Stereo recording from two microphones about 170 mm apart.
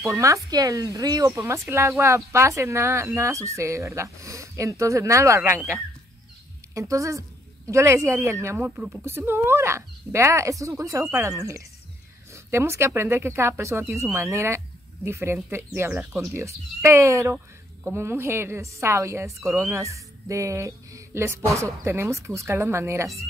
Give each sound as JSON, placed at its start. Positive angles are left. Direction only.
{"t": 0.0, "sound": "speech", "side_deg": -15}
{"t": 6.7, "sound": "a woman's voice", "side_deg": -20}